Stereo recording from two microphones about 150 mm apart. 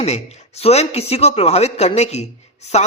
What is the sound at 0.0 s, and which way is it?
A man's voice, 45° left (ahead or behind).